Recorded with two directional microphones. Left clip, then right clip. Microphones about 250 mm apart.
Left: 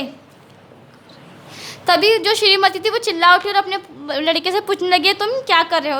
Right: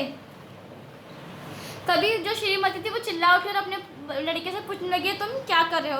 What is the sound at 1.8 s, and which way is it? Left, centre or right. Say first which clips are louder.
A woman's voice: left 9 dB; left.